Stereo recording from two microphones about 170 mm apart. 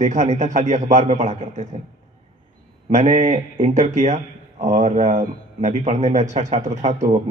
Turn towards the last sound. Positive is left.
turn(degrees=-45)  # may be behind; listen again after turning